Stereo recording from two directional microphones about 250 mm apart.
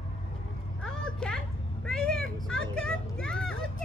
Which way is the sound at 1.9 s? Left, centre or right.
Centre.